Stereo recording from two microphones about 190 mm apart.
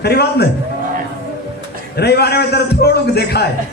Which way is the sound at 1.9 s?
60° left (ahead or behind).